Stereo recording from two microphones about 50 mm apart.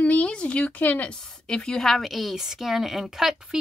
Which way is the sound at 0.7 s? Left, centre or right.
Left.